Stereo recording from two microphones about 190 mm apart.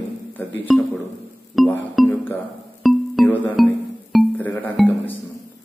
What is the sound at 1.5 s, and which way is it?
Music, centre (ahead or behind).